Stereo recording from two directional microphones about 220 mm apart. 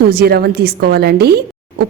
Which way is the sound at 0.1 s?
45° right (ahead or behind).